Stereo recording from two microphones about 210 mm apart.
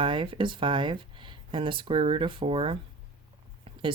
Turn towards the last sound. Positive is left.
turn(degrees=-25)  # may be behind; listen again after turning